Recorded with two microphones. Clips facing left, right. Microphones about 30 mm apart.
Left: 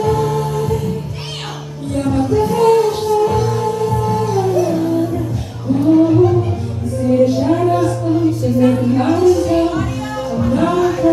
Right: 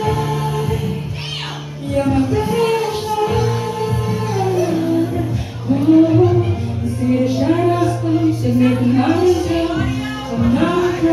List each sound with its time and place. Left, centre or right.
0.0 s music: centre
2.0 s music: centre
5.8 s a sound: centre
7.0 s music: centre